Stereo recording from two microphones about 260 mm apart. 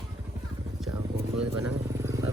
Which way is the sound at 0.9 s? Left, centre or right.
Right.